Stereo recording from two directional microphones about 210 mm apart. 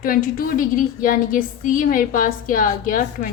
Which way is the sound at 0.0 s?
45° left (ahead or behind).